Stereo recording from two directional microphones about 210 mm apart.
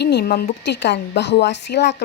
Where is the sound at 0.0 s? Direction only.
50° left (ahead or behind).